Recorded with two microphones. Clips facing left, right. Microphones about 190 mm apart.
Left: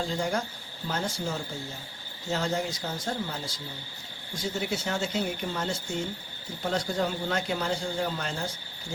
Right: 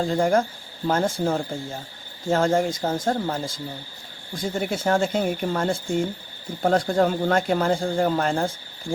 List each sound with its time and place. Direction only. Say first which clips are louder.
0.0 s a man's voice: right 9 dB; 50° right (ahead or behind)